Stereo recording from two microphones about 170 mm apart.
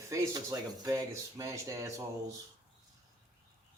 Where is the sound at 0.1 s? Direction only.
20° right (ahead or behind).